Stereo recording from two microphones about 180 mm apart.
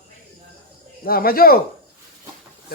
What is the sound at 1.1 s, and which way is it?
Speech, 55° left (ahead or behind).